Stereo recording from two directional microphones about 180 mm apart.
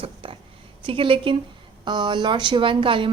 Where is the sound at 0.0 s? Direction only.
30° right (ahead or behind).